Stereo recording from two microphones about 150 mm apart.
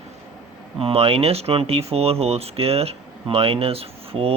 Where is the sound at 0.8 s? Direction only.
40° right (ahead or behind).